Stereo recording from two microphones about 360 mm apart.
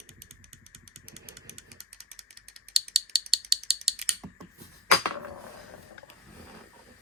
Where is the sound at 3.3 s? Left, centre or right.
Centre.